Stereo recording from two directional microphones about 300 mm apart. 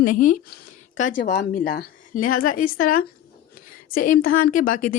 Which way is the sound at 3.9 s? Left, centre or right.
Left.